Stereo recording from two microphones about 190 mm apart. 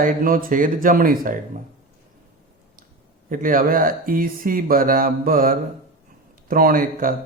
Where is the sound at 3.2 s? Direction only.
45° right (ahead or behind).